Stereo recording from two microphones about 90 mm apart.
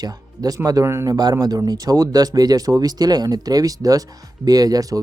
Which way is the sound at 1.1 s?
45° right (ahead or behind).